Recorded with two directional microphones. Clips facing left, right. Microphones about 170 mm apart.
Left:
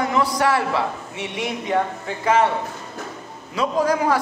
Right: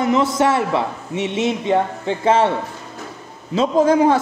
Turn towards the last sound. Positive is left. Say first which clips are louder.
# right 6 dB
turn(degrees=-25)  # may be behind; listen again after turning